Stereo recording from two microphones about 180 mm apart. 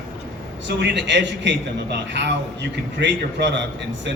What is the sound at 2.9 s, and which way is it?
Speech, 75° right (ahead or behind).